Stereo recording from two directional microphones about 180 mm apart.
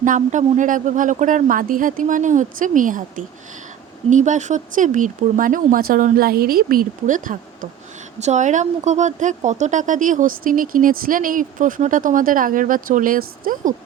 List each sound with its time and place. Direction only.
0.0 s speech: 45° right (ahead or behind)